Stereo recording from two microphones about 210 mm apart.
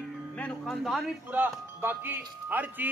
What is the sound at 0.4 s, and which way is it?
A man's voice, centre (ahead or behind).